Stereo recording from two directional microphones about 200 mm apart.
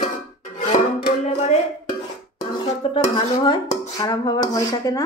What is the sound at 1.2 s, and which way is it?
Music, 35° left (ahead or behind).